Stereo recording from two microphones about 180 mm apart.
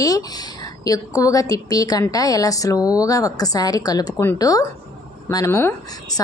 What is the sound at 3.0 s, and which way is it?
A woman's voice, 20° left (ahead or behind).